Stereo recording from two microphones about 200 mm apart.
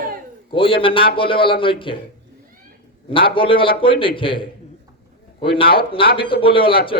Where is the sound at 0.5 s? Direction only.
25° left (ahead or behind).